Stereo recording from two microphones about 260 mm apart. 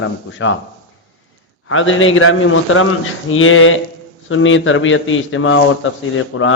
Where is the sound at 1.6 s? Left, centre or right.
Left.